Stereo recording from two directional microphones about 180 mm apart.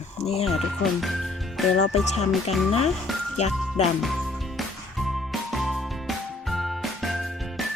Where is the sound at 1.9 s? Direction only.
40° left (ahead or behind).